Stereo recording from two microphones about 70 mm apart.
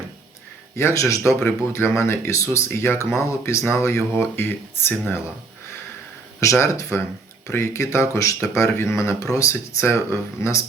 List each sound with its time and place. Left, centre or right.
0.8 s speech: left
6.4 s speech: left